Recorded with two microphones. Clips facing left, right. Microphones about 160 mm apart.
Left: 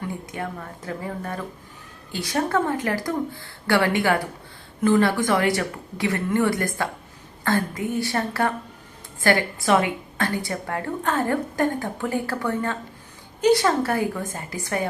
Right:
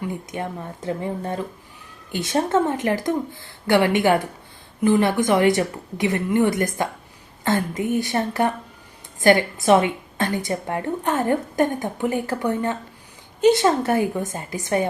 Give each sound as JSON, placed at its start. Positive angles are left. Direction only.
{"t": 0.3, "sound": "a woman's voice", "side_deg": -20}